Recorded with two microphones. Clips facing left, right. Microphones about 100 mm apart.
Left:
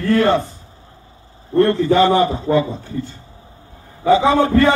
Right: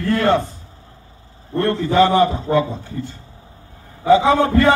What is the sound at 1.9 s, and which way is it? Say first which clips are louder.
Speech: right 4 dB; centre (ahead or behind).